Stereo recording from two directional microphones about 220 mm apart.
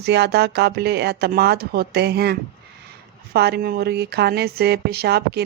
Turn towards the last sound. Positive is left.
turn(degrees=-50)  # may be behind; listen again after turning